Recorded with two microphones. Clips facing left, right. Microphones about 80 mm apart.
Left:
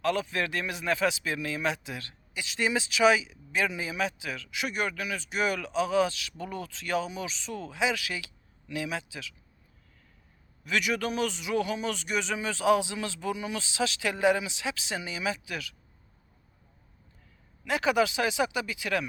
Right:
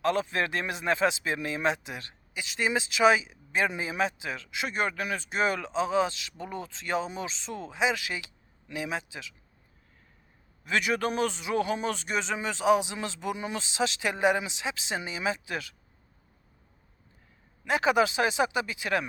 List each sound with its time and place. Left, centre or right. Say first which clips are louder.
0.0 s speech: right 1 dB; right
10.6 s speech: right 2 dB; right
17.7 s speech: right 1 dB; right